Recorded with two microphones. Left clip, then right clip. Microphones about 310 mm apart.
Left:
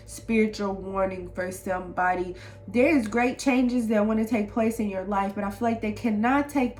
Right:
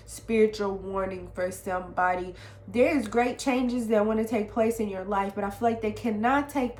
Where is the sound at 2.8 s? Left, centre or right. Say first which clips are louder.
Left 3 dB; centre.